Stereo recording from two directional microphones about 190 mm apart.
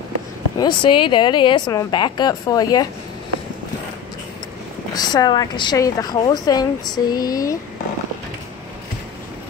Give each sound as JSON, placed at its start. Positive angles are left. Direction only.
{"t": 0.6, "sound": "a woman's voice", "side_deg": 25}
{"t": 4.9, "sound": "a woman's voice", "side_deg": 20}